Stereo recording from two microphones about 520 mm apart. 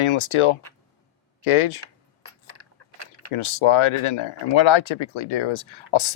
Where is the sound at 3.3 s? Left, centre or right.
Left.